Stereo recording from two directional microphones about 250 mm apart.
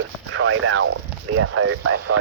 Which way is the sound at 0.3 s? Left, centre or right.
Right.